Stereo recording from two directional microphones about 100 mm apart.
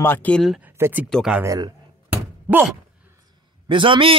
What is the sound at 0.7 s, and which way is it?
Speech, 25° right (ahead or behind).